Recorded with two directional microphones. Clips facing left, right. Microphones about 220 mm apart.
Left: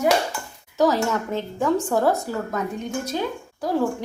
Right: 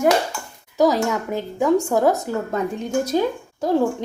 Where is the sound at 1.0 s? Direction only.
10° right (ahead or behind).